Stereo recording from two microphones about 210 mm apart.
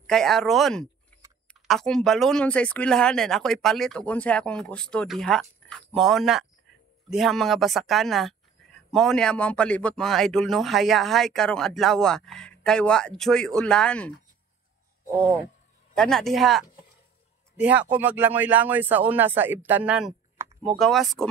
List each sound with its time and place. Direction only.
0.0 s speech: centre (ahead or behind)
15.9 s speech: 5° left (ahead or behind)